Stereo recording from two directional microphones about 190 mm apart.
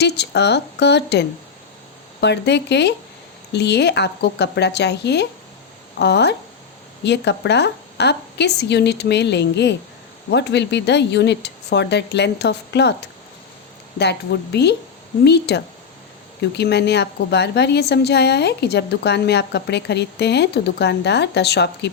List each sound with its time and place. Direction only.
0.0 s a woman's voice: 60° left (ahead or behind)
14.0 s a woman's voice: 65° left (ahead or behind)